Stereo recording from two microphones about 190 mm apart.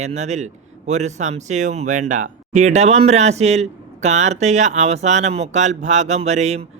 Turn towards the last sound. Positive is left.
turn(degrees=-35)  # may be behind; listen again after turning